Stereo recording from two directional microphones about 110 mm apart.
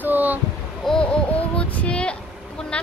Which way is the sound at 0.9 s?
Centre (ahead or behind).